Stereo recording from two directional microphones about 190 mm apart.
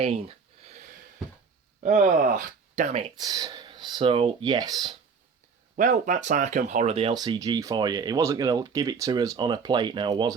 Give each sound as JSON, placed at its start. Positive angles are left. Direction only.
{"t": 0.0, "sound": "a sound", "side_deg": -35}
{"t": 1.8, "sound": "speech", "side_deg": -35}
{"t": 3.2, "sound": "speech", "side_deg": -20}
{"t": 5.7, "sound": "speech", "side_deg": -40}